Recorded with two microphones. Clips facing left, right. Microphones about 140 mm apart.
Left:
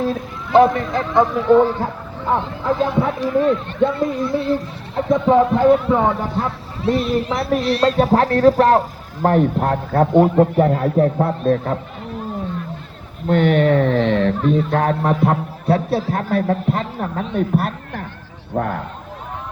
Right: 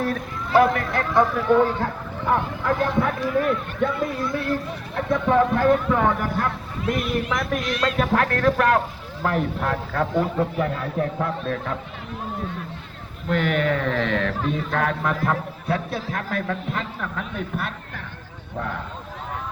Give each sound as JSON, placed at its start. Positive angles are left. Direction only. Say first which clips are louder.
{"t": 0.0, "sound": "speech", "louder": "left 4 dB", "side_deg": 20}
{"t": 13.2, "sound": "speech", "louder": "left 7 dB", "side_deg": 35}
{"t": 18.5, "sound": "speech", "louder": "left 8 dB", "side_deg": 50}